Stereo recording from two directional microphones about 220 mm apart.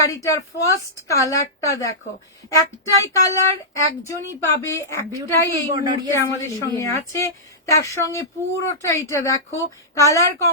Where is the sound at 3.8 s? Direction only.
15° left (ahead or behind).